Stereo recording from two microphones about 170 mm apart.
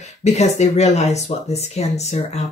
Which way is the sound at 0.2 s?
40° left (ahead or behind).